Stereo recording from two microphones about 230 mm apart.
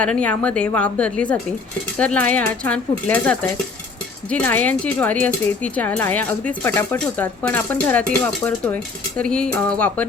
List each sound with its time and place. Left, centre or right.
0.0 s a woman's voice: centre